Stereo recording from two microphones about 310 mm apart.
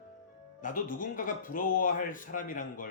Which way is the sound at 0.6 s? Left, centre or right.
Left.